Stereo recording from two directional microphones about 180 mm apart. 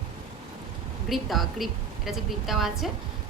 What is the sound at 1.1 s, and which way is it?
A woman's voice, centre (ahead or behind).